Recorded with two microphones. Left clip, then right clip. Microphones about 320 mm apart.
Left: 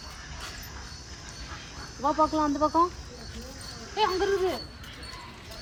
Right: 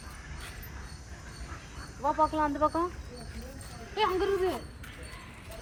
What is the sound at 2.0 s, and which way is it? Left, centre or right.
Speech, left.